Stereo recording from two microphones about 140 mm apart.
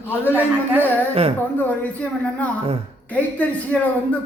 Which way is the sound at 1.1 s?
45° right (ahead or behind).